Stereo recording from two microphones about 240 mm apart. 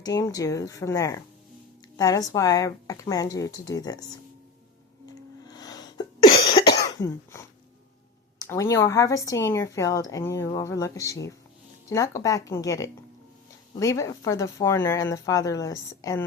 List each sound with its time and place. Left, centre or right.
0.0 s speech: centre
5.0 s sneeze: centre
6.5 s cough: centre
8.4 s speech: centre